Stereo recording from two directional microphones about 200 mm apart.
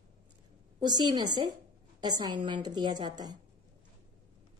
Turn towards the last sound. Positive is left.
turn(degrees=-20)  # may be behind; listen again after turning